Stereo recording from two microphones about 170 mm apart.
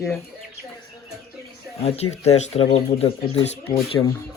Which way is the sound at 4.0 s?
15° left (ahead or behind).